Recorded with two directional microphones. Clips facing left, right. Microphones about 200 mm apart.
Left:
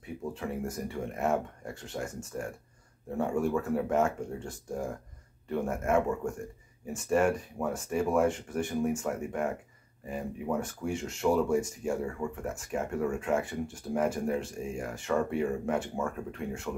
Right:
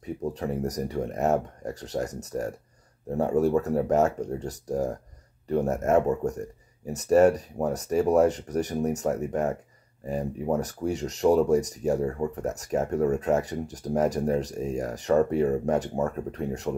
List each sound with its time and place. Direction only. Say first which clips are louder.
0.0 s speech: right 6 dB; 40° right (ahead or behind)